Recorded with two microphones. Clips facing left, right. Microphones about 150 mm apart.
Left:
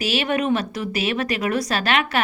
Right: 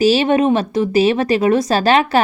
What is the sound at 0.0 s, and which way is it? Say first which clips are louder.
A woman's voice: right 9 dB; 30° right (ahead or behind).